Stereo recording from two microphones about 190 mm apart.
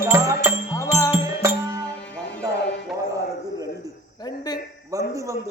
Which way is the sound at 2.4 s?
20° right (ahead or behind).